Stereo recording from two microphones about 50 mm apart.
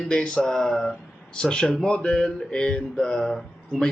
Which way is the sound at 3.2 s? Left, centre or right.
Centre.